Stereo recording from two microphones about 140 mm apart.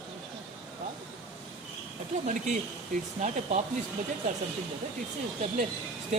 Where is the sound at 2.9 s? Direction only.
55° right (ahead or behind).